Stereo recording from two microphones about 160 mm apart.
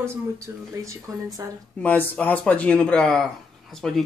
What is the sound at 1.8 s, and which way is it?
Speech, 10° left (ahead or behind).